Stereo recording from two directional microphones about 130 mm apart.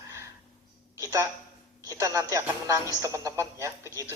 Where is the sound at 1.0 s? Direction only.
25° right (ahead or behind).